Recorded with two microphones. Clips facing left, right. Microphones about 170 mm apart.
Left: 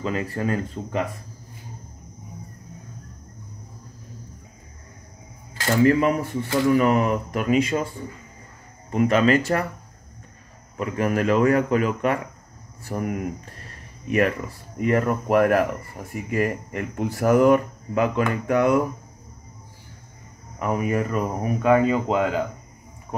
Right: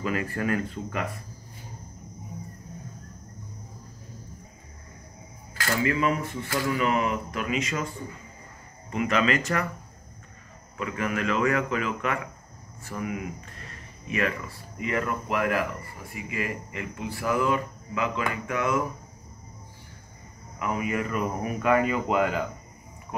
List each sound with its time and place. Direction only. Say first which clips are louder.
0.0 s speech: left 2 dB; 25° left (ahead or behind)
5.5 s camera: left 5 dB; 25° left (ahead or behind)
5.9 s a sound: left 6 dB; 45° left (ahead or behind)
6.8 s speech: left 5 dB; 45° left (ahead or behind)
8.9 s speech: left 6 dB; 40° left (ahead or behind)
10.8 s speech: left 6 dB; 40° left (ahead or behind)
12.8 s a sound: left 5 dB; 45° left (ahead or behind)
14.8 s a sound: left 7 dB; 40° left (ahead or behind)
20.5 s speech: left 5 dB; 40° left (ahead or behind)